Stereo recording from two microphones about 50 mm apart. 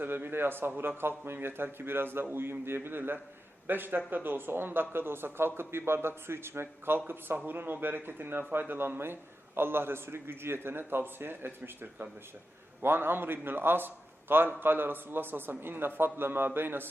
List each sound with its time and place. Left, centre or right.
0.0 s speech: right